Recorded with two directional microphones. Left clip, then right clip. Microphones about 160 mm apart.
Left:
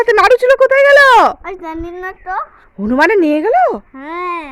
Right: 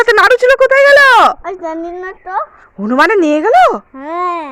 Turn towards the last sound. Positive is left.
turn(degrees=20)  # may be behind; listen again after turning